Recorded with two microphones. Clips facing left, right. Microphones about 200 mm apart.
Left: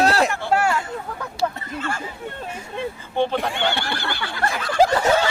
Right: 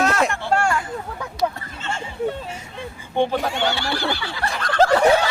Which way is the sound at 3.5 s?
55° left (ahead or behind).